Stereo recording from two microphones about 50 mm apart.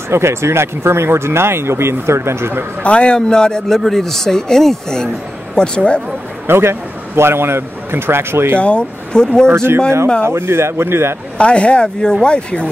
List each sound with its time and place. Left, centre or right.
0.1 s speech: right
2.8 s speech: left
6.4 s a man's voice: right
8.5 s speech: left
9.5 s speech: right
11.3 s speech: left